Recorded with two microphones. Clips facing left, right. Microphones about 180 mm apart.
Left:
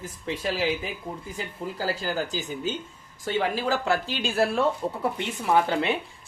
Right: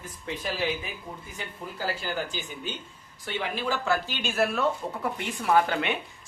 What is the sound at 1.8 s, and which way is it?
Speech, 40° left (ahead or behind).